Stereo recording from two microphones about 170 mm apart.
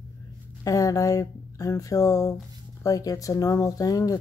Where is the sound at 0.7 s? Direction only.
20° left (ahead or behind).